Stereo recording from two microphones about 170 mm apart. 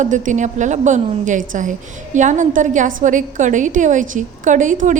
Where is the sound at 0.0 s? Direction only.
45° right (ahead or behind).